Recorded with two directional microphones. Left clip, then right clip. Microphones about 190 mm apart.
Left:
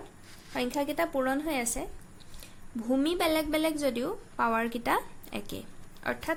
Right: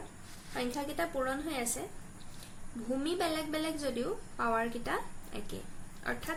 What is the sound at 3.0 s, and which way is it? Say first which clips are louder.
A woman's voice: left 6 dB; 60° left (ahead or behind).